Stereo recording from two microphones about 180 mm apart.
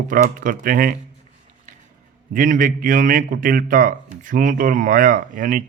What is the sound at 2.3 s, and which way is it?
A man's voice, 45° right (ahead or behind).